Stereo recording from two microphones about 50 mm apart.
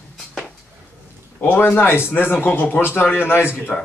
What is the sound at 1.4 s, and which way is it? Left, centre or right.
Speech, left.